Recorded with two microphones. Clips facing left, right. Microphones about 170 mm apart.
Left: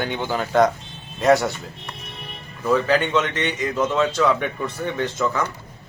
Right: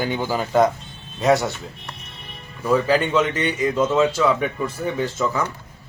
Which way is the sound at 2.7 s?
10° right (ahead or behind).